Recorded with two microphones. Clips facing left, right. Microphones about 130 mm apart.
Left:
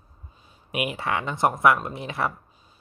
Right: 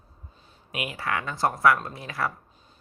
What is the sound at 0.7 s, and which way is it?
Speech, 20° left (ahead or behind).